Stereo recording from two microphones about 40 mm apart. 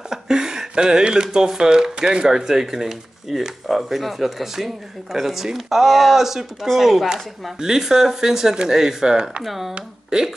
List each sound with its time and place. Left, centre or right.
0.1 s speech: centre
9.4 s speech: centre
9.8 s speech: centre